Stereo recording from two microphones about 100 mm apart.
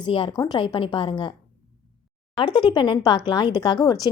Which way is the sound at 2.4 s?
50° left (ahead or behind).